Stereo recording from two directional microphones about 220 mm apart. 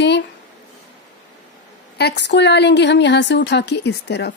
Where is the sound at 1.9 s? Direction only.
50° left (ahead or behind).